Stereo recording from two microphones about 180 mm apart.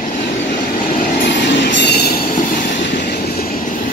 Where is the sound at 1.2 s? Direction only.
75° left (ahead or behind).